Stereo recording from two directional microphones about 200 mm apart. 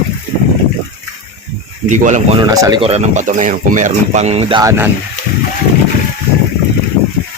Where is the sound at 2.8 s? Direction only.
30° right (ahead or behind).